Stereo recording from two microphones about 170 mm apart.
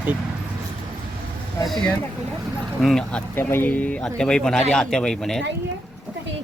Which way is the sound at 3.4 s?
15° left (ahead or behind).